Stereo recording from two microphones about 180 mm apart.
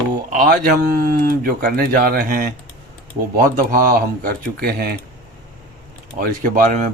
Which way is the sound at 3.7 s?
50° right (ahead or behind).